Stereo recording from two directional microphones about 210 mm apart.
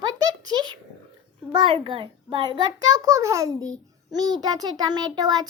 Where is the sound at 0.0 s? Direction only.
20° right (ahead or behind).